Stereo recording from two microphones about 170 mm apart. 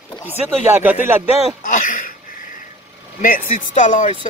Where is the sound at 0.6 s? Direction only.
10° right (ahead or behind).